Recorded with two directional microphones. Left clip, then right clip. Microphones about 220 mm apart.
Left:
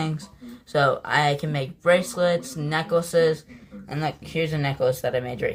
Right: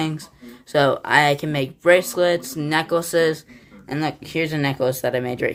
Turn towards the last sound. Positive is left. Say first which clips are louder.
# right 3 dB
turn(degrees=-45)  # may be behind; listen again after turning